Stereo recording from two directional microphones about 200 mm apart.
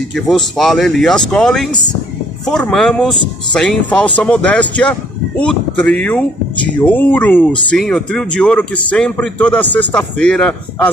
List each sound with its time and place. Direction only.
0.1 s speech: centre (ahead or behind)